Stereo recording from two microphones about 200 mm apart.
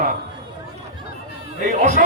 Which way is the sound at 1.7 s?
40° right (ahead or behind).